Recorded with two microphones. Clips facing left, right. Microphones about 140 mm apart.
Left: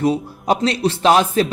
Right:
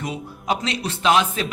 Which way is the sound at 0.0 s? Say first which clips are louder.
Left 11 dB; 35° left (ahead or behind).